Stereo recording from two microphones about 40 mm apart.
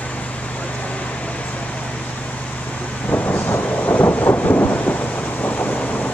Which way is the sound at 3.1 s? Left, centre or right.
Left.